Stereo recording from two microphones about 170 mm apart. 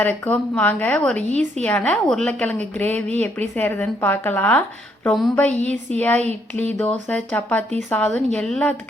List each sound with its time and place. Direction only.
0.0 s a woman's voice: 10° left (ahead or behind)
1.3 s a woman's voice: 45° right (ahead or behind)
1.6 s a woman's voice: 5° left (ahead or behind)
5.0 s a woman's voice: centre (ahead or behind)